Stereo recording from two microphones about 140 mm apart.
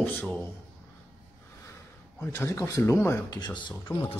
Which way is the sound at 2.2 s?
20° left (ahead or behind).